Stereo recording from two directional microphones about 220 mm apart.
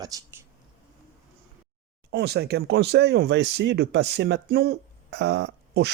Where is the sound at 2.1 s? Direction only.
50° right (ahead or behind).